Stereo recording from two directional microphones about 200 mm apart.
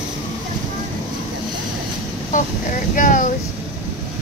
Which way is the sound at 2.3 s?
40° left (ahead or behind).